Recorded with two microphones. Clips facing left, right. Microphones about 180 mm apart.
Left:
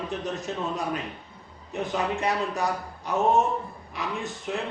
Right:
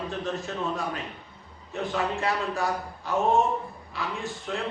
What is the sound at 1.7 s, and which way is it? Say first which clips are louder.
A man's voice: left 1 dB; 20° left (ahead or behind).